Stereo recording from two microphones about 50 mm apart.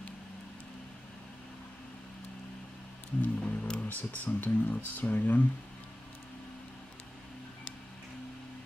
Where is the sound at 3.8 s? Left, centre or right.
Left.